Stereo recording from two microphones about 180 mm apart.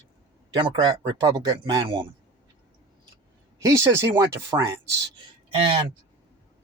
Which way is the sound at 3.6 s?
15° right (ahead or behind).